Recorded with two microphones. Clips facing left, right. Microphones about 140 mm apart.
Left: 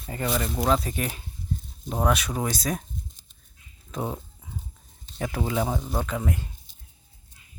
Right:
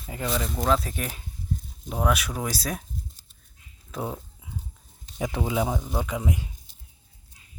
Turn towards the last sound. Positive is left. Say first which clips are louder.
# even
turn(degrees=-15)  # may be behind; listen again after turning